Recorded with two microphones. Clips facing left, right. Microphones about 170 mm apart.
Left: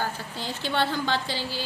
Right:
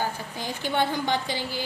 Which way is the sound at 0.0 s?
15° right (ahead or behind).